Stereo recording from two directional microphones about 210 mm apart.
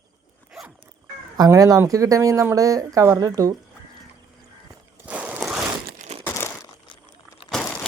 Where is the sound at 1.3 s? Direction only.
15° right (ahead or behind).